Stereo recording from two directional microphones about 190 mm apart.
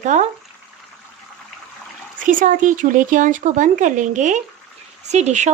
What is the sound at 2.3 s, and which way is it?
Speech, 45° right (ahead or behind).